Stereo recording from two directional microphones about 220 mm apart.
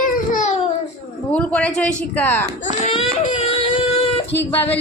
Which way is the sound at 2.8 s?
25° left (ahead or behind).